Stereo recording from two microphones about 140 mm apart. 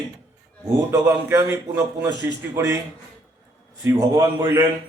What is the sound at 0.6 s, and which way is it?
A man's voice, 20° right (ahead or behind).